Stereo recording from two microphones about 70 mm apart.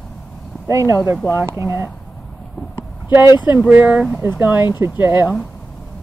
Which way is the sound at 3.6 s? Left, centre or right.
Right.